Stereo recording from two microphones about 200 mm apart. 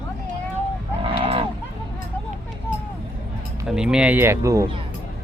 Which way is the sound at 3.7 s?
5° right (ahead or behind).